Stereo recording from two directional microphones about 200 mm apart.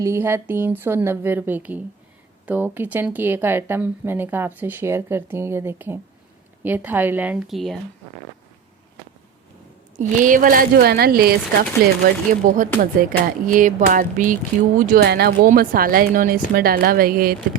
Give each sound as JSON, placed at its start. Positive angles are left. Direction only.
{"t": 0.0, "sound": "speech", "side_deg": -15}
{"t": 10.0, "sound": "speech", "side_deg": -40}